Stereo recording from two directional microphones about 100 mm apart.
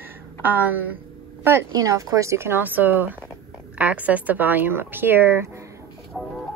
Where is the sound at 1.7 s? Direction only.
35° right (ahead or behind).